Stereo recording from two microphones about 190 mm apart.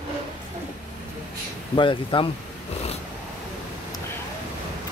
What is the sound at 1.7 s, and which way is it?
Speech, 25° left (ahead or behind).